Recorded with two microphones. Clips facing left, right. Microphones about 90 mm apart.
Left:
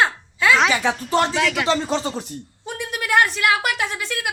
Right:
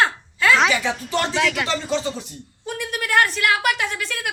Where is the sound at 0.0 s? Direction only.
10° left (ahead or behind).